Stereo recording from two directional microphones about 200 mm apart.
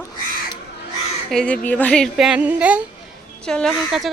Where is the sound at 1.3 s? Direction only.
5° left (ahead or behind).